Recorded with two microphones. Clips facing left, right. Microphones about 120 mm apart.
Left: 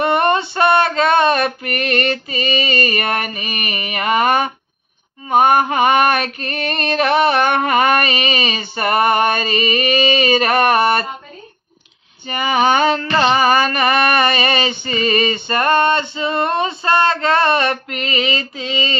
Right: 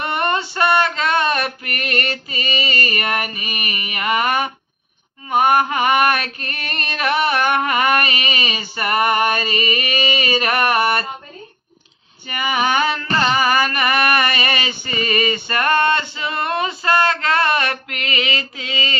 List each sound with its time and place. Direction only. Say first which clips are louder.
0.0 s female singing: left 6 dB; 25° left (ahead or behind)
5.3 s mantra: left 3 dB; 25° left (ahead or behind)
12.3 s mantra: left 4 dB; 25° left (ahead or behind)